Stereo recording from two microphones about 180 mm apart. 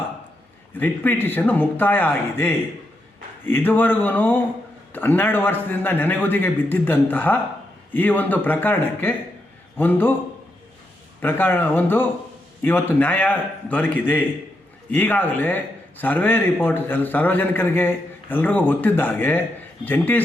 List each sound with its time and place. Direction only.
0.8 s a man's voice: 10° left (ahead or behind)
11.2 s a man's voice: 10° left (ahead or behind)